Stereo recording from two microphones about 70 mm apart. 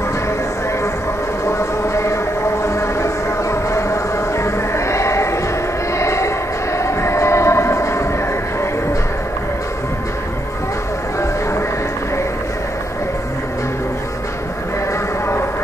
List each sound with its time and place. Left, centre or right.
1.4 s train: left
6.8 s music: left